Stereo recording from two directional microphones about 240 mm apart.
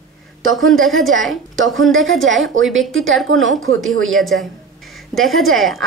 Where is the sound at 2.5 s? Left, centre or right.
Right.